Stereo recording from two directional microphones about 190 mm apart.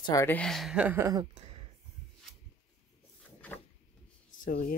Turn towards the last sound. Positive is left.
turn(degrees=50)  # may be behind; listen again after turning